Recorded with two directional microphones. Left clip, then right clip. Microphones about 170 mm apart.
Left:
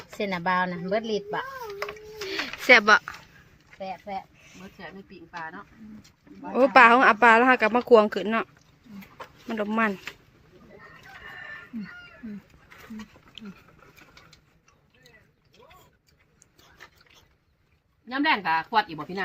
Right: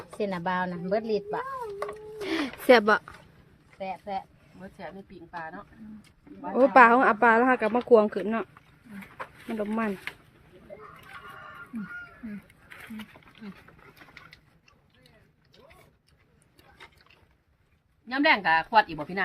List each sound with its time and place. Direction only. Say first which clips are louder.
0.2 s speech: left 4 dB; 35° left (ahead or behind)
2.2 s a sound: right 1 dB; 60° right (ahead or behind)
2.6 s speech: left 3 dB; 25° right (ahead or behind)
3.8 s speech: right 1 dB; 15° left (ahead or behind)
5.3 s speech: left 1 dB; 10° right (ahead or behind)
9.5 s speech: left 5 dB; 5° left (ahead or behind)
12.7 s roaring cats: right 1 dB; 5° right (ahead or behind)
18.1 s speech: right 2 dB; 15° right (ahead or behind)